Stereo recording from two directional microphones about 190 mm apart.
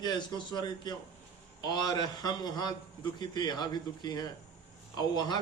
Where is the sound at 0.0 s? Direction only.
20° left (ahead or behind).